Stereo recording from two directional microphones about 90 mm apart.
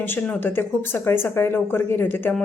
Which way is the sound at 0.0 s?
20° left (ahead or behind).